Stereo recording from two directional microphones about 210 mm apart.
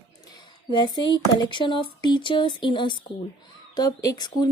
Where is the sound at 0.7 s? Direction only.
20° left (ahead or behind).